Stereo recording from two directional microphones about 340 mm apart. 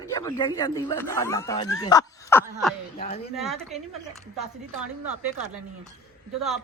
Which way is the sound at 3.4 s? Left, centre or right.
Centre.